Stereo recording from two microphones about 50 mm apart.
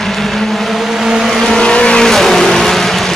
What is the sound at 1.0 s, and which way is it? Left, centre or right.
Vehicle, centre.